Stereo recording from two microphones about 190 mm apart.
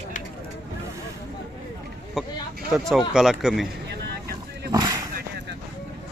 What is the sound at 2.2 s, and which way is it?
A man's voice, centre (ahead or behind).